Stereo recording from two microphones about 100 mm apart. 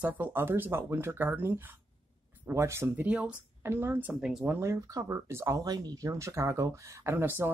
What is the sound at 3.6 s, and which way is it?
Speech, 25° right (ahead or behind).